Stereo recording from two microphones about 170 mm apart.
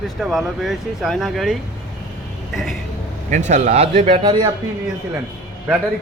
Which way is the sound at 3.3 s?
45° right (ahead or behind).